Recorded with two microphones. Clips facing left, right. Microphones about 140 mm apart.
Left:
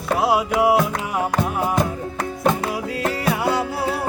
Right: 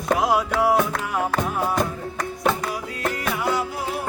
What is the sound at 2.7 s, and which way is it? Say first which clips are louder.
Music: left 4 dB; 25° left (ahead or behind).